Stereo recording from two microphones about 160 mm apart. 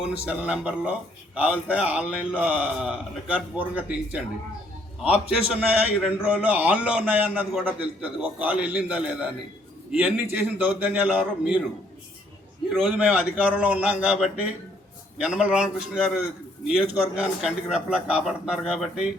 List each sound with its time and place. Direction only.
0.3 s a man's voice: 5° right (ahead or behind)
12.9 s a man's voice: 10° right (ahead or behind)